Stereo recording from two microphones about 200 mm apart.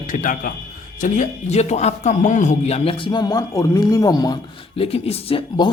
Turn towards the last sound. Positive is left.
turn(degrees=25)  # may be behind; listen again after turning